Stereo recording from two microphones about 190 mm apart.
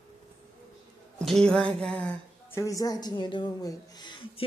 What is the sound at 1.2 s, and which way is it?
A woman's voice, centre (ahead or behind).